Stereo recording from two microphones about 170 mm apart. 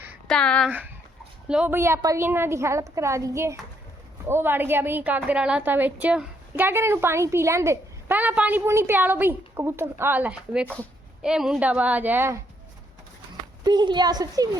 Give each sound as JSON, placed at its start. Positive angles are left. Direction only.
{"t": 0.3, "sound": "speech", "side_deg": 5}
{"t": 1.5, "sound": "a woman's voice", "side_deg": -5}
{"t": 13.7, "sound": "a woman's voice", "side_deg": -25}